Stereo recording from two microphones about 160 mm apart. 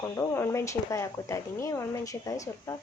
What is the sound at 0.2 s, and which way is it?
Speech, 15° left (ahead or behind).